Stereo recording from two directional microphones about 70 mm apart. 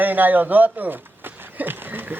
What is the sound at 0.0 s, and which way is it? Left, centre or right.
A man's voice, right.